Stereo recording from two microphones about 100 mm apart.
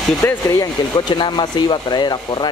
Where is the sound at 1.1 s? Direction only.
50° left (ahead or behind).